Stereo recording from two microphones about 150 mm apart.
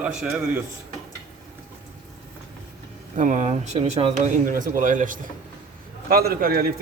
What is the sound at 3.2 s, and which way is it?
Speech, 50° right (ahead or behind).